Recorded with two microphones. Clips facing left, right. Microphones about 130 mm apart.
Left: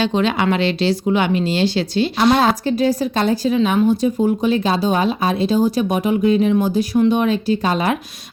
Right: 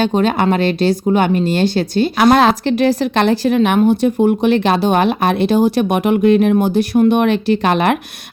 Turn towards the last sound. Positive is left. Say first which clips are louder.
# right 4 dB
turn(degrees=-70)  # may be behind; listen again after turning